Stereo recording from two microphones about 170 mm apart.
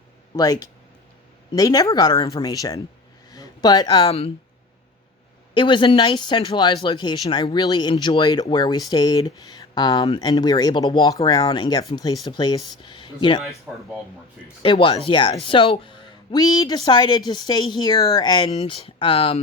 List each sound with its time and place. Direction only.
0.3 s speech: 20° left (ahead or behind)
5.5 s speech: 30° left (ahead or behind)
13.7 s speech: 10° right (ahead or behind)
14.6 s speech: 30° left (ahead or behind)